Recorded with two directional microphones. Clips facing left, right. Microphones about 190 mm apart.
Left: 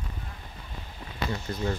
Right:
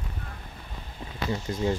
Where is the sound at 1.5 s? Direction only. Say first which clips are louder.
Right 2 dB; 20° right (ahead or behind).